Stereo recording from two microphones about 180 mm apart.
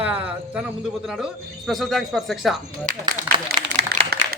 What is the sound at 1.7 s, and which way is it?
Speech, centre (ahead or behind).